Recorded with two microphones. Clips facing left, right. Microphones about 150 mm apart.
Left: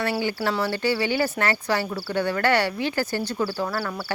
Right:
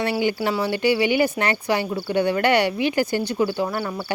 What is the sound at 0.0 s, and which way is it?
Speech, 20° right (ahead or behind).